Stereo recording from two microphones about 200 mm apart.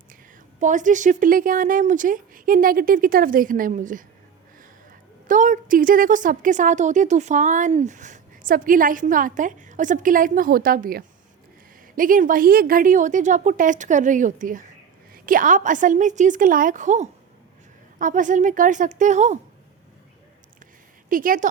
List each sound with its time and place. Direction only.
0.6 s speech: 40° right (ahead or behind)
5.3 s speech: 40° right (ahead or behind)
21.1 s speech: 45° right (ahead or behind)